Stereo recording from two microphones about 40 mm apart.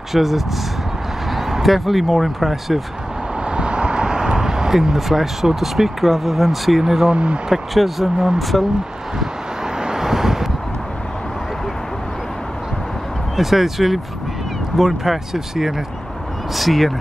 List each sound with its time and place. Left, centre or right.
0.1 s speech: centre
3.4 s speech: right; by 7.1 s centre
7.1 s speech: right
7.7 s speech: centre
9.8 s vehicle: centre
13.4 s speech: centre